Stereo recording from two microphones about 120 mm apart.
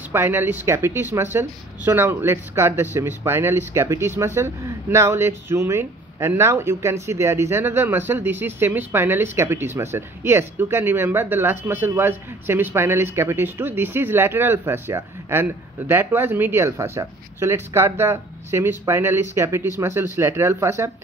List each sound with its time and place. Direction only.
0.1 s speech: 20° right (ahead or behind)